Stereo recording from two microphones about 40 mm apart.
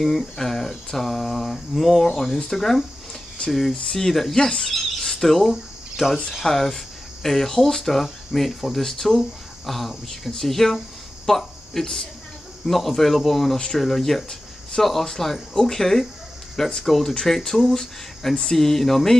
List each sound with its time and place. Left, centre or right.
0.0 s speech: centre
3.4 s speech: left
3.9 s speech: centre
5.5 s cricket: centre
6.4 s speech: centre